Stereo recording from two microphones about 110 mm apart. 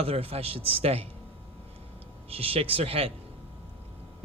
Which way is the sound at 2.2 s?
60° right (ahead or behind).